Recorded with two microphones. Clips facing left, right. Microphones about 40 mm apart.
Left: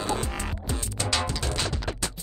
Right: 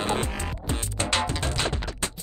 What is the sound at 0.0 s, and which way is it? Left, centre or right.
Music, right.